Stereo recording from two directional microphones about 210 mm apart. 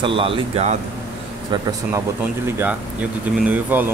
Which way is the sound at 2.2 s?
5° right (ahead or behind).